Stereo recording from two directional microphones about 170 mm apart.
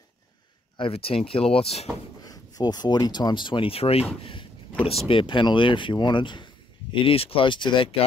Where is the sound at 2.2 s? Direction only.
20° left (ahead or behind).